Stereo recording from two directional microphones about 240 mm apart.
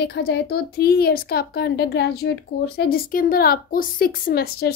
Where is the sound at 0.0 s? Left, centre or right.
Left.